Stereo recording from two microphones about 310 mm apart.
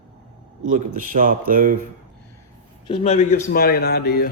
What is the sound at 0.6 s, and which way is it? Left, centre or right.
Speech, right.